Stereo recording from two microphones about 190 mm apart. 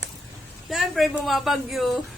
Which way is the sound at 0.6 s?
Centre (ahead or behind).